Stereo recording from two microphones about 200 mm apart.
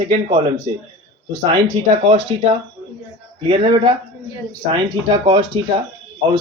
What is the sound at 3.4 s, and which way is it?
Speech, 25° right (ahead or behind).